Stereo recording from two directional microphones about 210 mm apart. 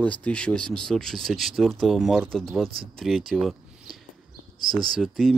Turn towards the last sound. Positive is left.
turn(degrees=0)  # may be behind; listen again after turning